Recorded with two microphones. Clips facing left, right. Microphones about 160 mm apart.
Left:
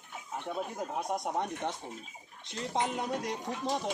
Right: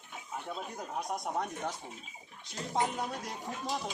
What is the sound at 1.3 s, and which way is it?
Speech, 25° left (ahead or behind).